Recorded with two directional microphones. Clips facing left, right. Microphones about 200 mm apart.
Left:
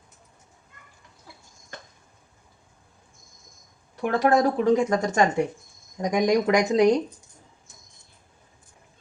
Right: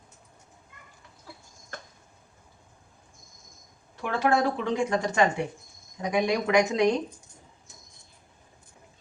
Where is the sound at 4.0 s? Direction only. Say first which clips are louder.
Left 4 dB; 40° left (ahead or behind).